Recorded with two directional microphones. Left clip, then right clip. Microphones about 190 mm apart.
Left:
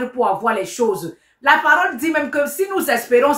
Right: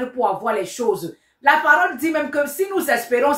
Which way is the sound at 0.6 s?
20° left (ahead or behind).